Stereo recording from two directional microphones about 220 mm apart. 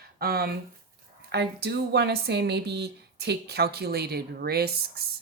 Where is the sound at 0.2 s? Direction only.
45° right (ahead or behind).